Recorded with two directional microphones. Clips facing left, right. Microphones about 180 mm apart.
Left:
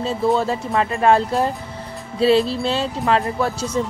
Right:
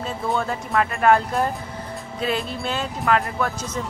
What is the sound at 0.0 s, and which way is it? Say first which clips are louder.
A woman's voice: left 6 dB; 25° left (ahead or behind).